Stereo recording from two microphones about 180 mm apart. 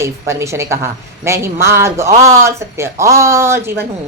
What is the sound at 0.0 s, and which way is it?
Speech, 15° right (ahead or behind).